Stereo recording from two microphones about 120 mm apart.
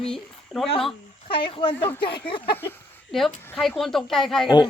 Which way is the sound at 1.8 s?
15° left (ahead or behind).